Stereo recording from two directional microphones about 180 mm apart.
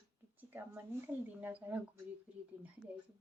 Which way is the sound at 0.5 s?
10° right (ahead or behind).